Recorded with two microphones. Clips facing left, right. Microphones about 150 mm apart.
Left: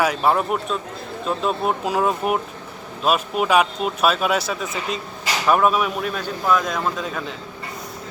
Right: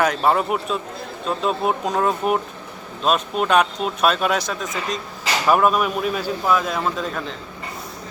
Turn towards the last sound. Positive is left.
turn(degrees=0)  # may be behind; listen again after turning